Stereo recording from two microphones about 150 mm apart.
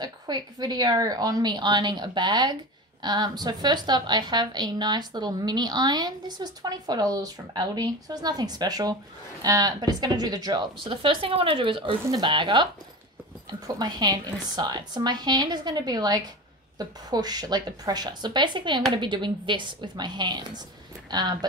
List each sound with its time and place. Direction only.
0.0 s a woman's voice: 25° right (ahead or behind)
13.7 s a woman's voice: 30° right (ahead or behind)